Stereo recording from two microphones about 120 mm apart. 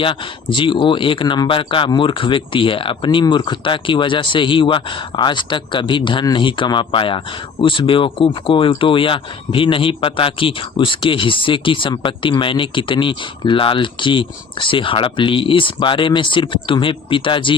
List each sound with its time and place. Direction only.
0.0 s speech: 45° left (ahead or behind)